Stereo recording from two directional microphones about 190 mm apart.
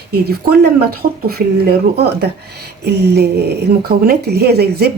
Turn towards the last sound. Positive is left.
turn(degrees=-55)  # may be behind; listen again after turning